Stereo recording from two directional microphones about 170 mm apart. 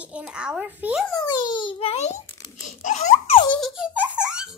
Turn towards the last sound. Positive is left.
turn(degrees=-5)  # may be behind; listen again after turning